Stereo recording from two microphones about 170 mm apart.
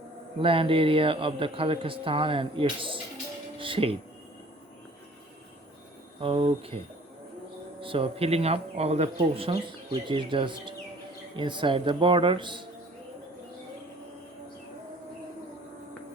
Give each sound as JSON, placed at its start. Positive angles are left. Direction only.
{"t": 0.3, "sound": "speech", "side_deg": -30}
{"t": 6.1, "sound": "speech", "side_deg": -35}
{"t": 7.8, "sound": "speech", "side_deg": -30}